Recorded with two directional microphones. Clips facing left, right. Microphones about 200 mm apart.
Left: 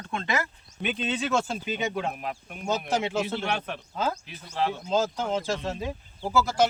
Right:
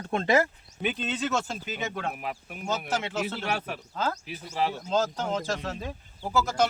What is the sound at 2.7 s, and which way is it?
Speech, 15° left (ahead or behind).